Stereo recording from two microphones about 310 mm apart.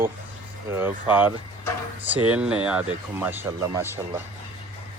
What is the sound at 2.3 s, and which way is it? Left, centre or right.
Speech, centre.